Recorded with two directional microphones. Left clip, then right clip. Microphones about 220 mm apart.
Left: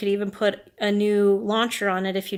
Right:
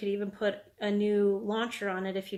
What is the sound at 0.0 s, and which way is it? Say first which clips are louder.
Speech: left 8 dB; 40° left (ahead or behind).